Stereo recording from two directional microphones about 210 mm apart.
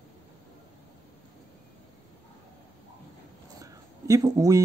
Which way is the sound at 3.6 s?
15° right (ahead or behind).